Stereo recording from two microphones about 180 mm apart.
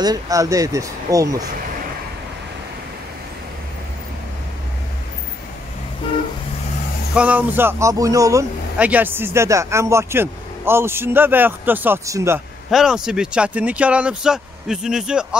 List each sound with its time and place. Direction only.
0.0 s speech: 20° right (ahead or behind)
7.2 s speech: 10° right (ahead or behind)
12.7 s speech: 5° right (ahead or behind)